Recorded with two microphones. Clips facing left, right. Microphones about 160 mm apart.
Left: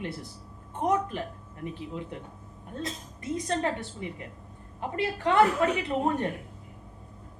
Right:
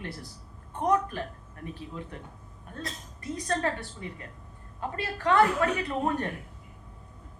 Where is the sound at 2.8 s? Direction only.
20° left (ahead or behind).